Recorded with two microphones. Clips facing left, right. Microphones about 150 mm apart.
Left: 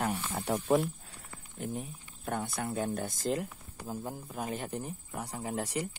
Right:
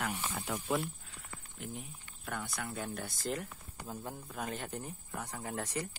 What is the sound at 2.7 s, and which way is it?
Speech, 35° left (ahead or behind).